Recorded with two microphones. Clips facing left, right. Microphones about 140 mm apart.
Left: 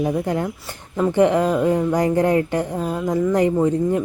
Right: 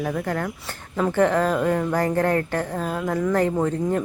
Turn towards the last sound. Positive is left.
turn(degrees=10)  # may be behind; listen again after turning